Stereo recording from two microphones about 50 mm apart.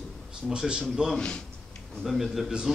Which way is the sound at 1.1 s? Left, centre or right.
Left.